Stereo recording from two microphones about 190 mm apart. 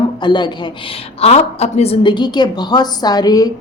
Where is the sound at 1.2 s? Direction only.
35° left (ahead or behind).